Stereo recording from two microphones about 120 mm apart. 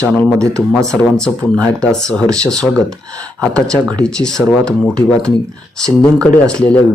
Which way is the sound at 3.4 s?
5° left (ahead or behind).